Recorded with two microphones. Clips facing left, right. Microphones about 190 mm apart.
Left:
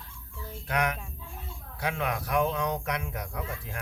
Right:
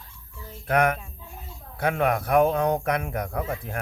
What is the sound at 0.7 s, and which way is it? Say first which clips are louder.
Speech: right 7 dB; 55° right (ahead or behind).